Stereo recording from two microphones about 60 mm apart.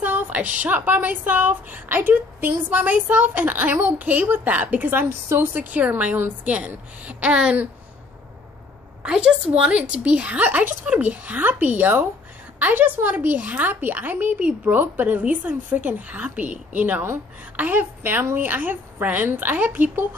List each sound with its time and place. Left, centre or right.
0.0 s a woman's voice: right
9.0 s a woman's voice: centre